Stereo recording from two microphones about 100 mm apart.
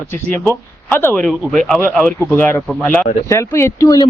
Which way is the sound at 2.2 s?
20° left (ahead or behind).